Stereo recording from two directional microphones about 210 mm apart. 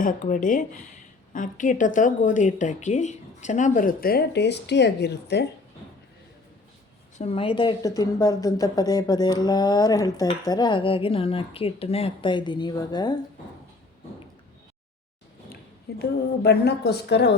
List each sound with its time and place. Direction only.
0.0 s a woman's voice: 40° left (ahead or behind)
7.2 s speech: 25° left (ahead or behind)
16.0 s a woman's voice: 50° left (ahead or behind)